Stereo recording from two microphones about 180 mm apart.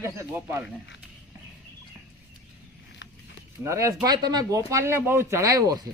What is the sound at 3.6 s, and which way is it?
Speech, 15° right (ahead or behind).